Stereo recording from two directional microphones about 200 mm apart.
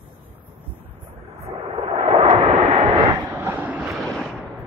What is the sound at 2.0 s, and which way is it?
Vehicle, 25° right (ahead or behind).